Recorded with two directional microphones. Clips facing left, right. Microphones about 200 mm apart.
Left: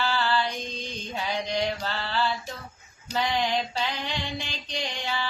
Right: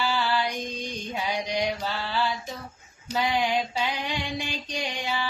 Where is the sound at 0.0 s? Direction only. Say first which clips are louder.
Even; 10° right (ahead or behind).